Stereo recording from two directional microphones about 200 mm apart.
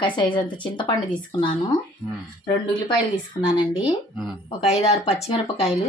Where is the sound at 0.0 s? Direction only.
25° left (ahead or behind).